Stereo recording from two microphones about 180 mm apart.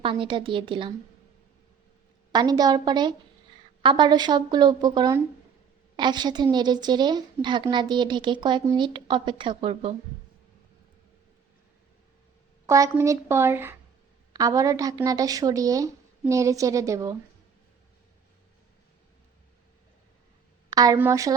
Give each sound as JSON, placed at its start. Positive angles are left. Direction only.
{"t": 0.0, "sound": "a woman's voice", "side_deg": -30}
{"t": 2.3, "sound": "a woman's voice", "side_deg": -20}
{"t": 12.6, "sound": "a woman's voice", "side_deg": -15}
{"t": 20.7, "sound": "a woman's voice", "side_deg": -20}